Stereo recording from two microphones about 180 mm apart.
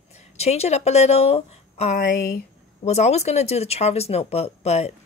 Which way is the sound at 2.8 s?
40° left (ahead or behind).